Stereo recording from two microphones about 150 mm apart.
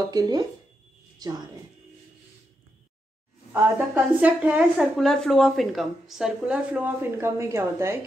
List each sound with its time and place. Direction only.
0.1 s speech: 25° right (ahead or behind)
3.5 s a woman's voice: 15° right (ahead or behind)